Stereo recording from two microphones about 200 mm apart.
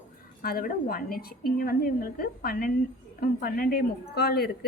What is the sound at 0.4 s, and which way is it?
A woman's voice, 50° left (ahead or behind).